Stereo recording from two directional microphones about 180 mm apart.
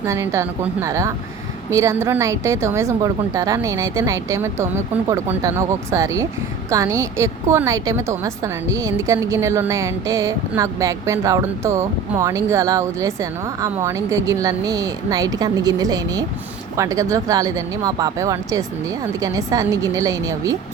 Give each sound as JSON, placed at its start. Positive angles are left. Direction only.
{"t": 0.0, "sound": "a woman's voice", "side_deg": -15}